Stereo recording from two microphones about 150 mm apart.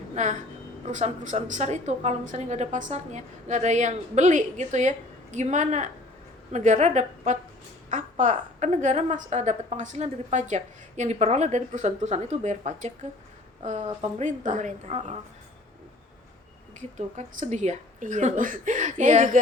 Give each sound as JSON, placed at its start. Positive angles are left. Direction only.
{"t": 0.2, "sound": "a woman's voice", "side_deg": -55}
{"t": 17.2, "sound": "speech", "side_deg": -50}